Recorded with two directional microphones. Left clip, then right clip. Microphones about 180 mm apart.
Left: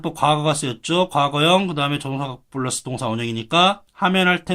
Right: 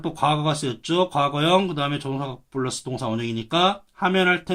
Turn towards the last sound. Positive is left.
turn(degrees=30)  # may be behind; listen again after turning